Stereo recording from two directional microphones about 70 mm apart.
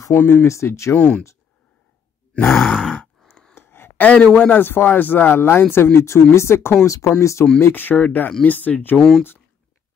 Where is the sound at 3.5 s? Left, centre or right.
Left.